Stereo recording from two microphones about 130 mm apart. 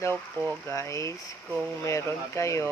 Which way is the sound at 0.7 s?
25° left (ahead or behind).